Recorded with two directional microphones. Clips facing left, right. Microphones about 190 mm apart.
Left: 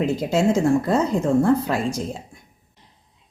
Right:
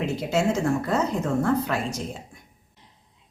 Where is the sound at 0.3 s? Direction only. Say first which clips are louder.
Left 4 dB; 30° left (ahead or behind).